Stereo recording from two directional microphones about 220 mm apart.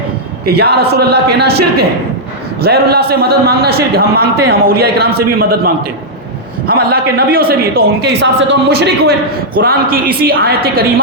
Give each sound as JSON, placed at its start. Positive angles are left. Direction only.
{"t": 0.4, "sound": "a man's voice", "side_deg": -45}
{"t": 2.6, "sound": "a man's voice", "side_deg": -45}